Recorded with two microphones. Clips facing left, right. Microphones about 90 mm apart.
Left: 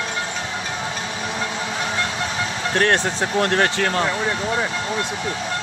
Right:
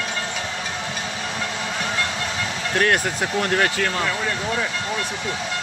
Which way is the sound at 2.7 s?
40° left (ahead or behind).